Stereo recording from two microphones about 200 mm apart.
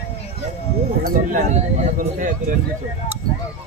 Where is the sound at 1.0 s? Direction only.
40° right (ahead or behind).